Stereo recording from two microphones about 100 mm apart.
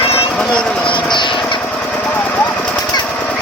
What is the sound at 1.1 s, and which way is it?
Vehicle, 50° left (ahead or behind).